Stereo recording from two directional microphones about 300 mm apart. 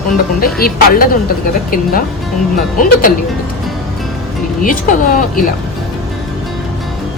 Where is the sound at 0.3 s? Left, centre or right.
Left.